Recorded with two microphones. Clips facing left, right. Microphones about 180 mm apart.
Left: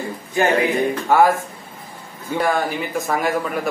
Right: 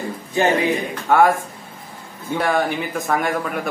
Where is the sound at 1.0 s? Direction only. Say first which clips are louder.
Right 1 dB; 5° left (ahead or behind).